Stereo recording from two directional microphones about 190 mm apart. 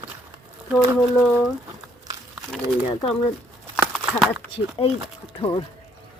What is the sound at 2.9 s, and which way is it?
Speech, 25° left (ahead or behind).